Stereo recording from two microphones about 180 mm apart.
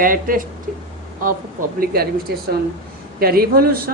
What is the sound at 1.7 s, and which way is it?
Speech, 55° right (ahead or behind).